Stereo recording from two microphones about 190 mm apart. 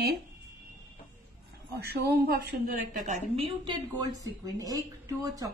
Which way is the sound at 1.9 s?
55° right (ahead or behind).